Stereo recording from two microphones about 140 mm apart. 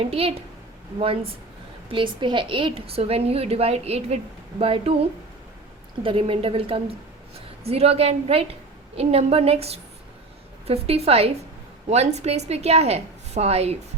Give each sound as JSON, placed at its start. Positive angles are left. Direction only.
{"t": 0.0, "sound": "a woman's voice", "side_deg": -45}